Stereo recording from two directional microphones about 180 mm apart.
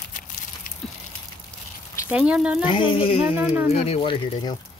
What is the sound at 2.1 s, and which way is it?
Speech, 5° right (ahead or behind).